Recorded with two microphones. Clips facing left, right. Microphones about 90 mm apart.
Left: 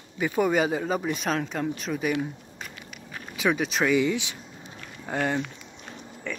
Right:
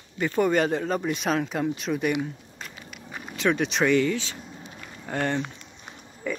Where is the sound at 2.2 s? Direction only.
Centre (ahead or behind).